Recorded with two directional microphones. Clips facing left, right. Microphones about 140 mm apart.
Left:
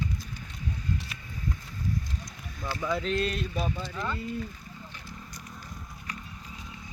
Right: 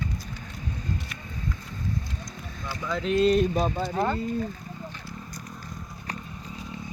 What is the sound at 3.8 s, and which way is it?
Speech, 55° right (ahead or behind).